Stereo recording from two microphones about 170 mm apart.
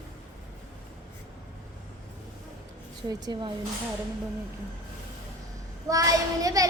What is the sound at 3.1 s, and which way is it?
Speech, 25° right (ahead or behind).